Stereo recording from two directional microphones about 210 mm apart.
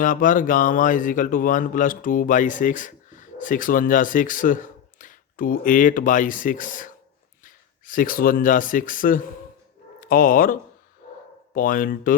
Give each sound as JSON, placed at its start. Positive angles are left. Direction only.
{"t": 0.0, "sound": "a man's voice", "side_deg": 40}
{"t": 11.0, "sound": "dog", "side_deg": 40}
{"t": 11.5, "sound": "a man's voice", "side_deg": 40}